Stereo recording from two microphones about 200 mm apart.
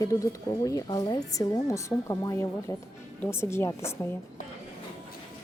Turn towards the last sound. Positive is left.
turn(degrees=15)  # may be behind; listen again after turning